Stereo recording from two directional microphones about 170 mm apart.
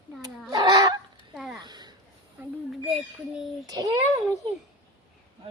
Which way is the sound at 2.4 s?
5° right (ahead or behind).